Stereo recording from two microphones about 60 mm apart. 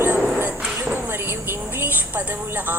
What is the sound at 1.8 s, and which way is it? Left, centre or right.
Speech, right.